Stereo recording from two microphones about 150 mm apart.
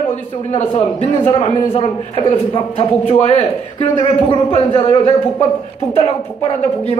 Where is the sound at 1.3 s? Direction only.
40° left (ahead or behind).